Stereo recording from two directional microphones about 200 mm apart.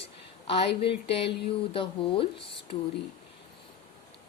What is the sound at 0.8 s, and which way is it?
Speech, 30° left (ahead or behind).